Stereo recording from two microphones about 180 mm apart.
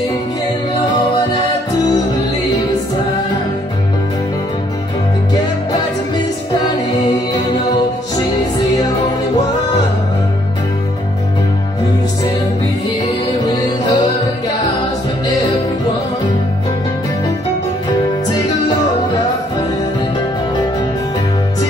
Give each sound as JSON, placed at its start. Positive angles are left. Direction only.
{"t": 13.0, "sound": "music", "side_deg": 20}